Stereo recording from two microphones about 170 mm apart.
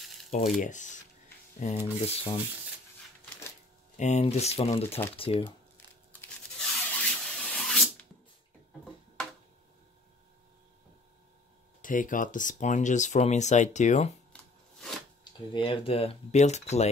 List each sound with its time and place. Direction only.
0.6 s speech: 45° left (ahead or behind)
1.8 s speech: 25° left (ahead or behind)
3.9 s speech: 40° left (ahead or behind)
6.1 s tearing: 10° left (ahead or behind)
6.6 s rub: 5° left (ahead or behind)
11.8 s speech: 50° left (ahead or behind)
14.3 s shuffling cards: 5° left (ahead or behind)
15.5 s speech: 30° left (ahead or behind)